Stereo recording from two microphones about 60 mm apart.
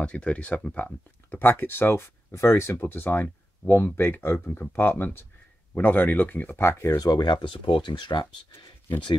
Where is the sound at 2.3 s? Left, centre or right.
Left.